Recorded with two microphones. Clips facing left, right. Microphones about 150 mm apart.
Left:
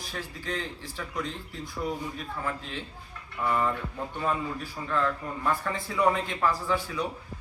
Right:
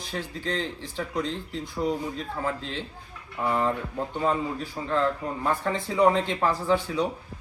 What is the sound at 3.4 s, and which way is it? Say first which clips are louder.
Speech: right 2 dB; 20° right (ahead or behind).